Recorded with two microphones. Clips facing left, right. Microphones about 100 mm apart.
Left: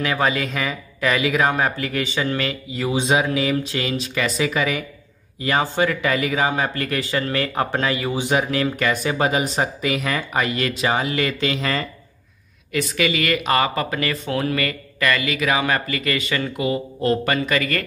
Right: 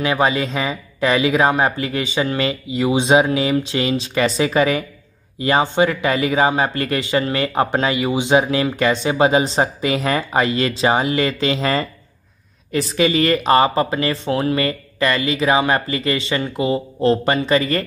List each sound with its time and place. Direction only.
0.0 s speech: 20° right (ahead or behind)